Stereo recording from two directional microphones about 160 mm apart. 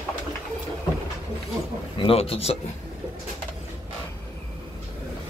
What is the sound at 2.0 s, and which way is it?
Speech, 35° left (ahead or behind).